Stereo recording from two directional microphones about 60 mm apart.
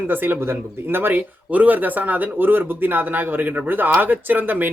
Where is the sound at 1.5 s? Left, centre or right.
Right.